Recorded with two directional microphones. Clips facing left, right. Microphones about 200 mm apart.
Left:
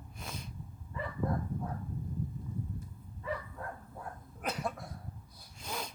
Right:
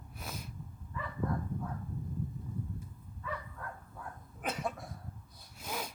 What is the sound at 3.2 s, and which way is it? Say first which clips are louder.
Bow-wow: left 3 dB; 30° left (ahead or behind).